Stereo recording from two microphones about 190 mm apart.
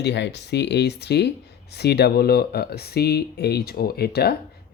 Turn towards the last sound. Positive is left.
turn(degrees=55)  # may be behind; listen again after turning